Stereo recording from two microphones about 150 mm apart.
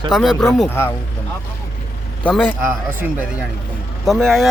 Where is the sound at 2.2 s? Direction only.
10° left (ahead or behind).